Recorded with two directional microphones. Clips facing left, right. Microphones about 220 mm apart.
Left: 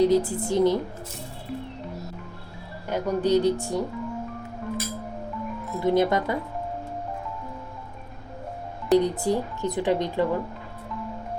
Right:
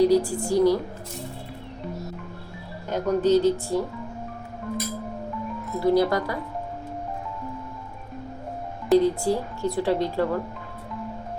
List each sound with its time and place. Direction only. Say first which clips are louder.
0.0 s speech: right 1 dB; 20° left (ahead or behind)
2.9 s speech: right 2 dB; 10° left (ahead or behind)
5.8 s speech: right 1 dB; 20° left (ahead or behind)
8.9 s speech: right 1 dB; centre (ahead or behind)
9.2 s speech: even; 20° left (ahead or behind)